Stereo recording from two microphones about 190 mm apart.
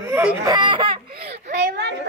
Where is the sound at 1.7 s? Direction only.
65° right (ahead or behind).